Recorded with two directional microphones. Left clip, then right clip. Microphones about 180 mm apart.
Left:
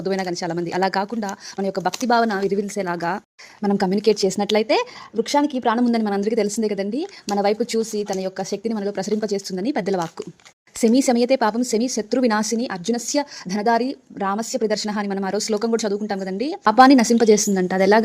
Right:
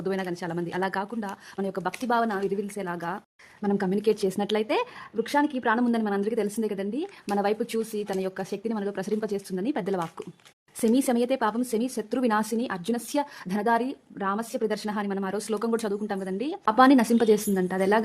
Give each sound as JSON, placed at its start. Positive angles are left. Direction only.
{"t": 0.0, "sound": "a woman's voice", "side_deg": 20}